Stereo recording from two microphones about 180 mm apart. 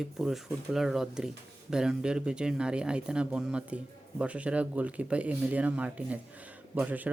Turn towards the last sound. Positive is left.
turn(degrees=-10)  # may be behind; listen again after turning